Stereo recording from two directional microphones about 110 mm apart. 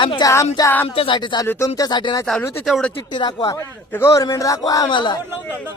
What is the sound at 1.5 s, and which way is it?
A man's voice, 25° left (ahead or behind).